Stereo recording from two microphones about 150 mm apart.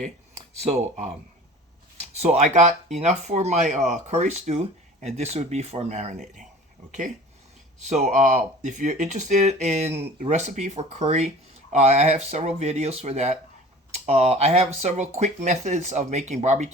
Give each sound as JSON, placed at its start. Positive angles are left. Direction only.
{"t": 0.7, "sound": "speech", "side_deg": -50}
{"t": 2.2, "sound": "speech", "side_deg": -50}
{"t": 7.9, "sound": "speech", "side_deg": -50}